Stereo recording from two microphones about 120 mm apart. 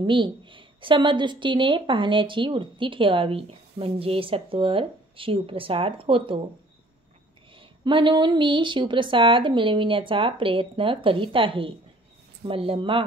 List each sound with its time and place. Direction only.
0.0 s a woman's voice: 40° right (ahead or behind)
7.5 s a woman's voice: 40° right (ahead or behind)